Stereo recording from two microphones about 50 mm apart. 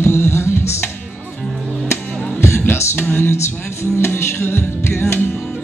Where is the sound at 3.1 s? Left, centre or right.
Left.